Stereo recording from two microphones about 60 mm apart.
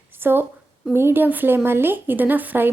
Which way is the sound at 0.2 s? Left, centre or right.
Right.